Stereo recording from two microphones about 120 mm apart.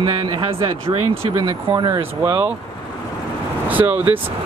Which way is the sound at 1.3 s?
35° right (ahead or behind).